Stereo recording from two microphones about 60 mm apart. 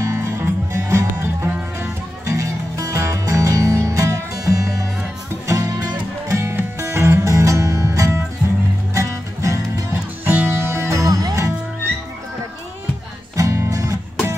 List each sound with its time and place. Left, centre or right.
0.0 s music: right
1.8 s music: right
6.5 s music: right
7.2 s music: right
10.2 s music: right
10.6 s music: right
13.4 s music: right